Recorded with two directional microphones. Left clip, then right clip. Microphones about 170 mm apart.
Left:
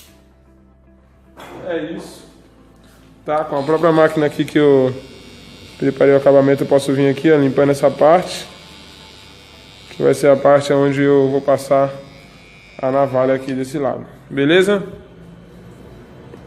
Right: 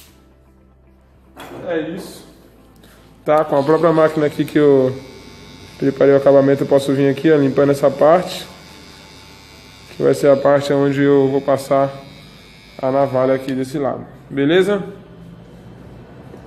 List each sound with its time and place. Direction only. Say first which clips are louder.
3.3 s a man's voice: right 4 dB; 35° right (ahead or behind)
3.8 s a man's voice: left 1 dB; 15° left (ahead or behind)
9.9 s speech: even; 5° left (ahead or behind)
14.3 s a man's voice: left 1 dB; 20° left (ahead or behind)